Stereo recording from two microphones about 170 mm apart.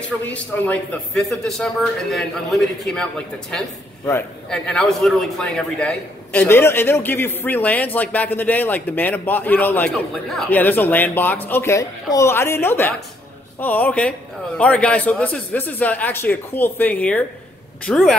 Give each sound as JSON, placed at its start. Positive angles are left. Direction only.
{"t": 0.2, "sound": "a man's voice", "side_deg": 10}